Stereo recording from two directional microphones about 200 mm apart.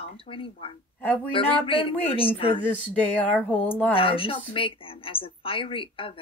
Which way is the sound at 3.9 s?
25° left (ahead or behind).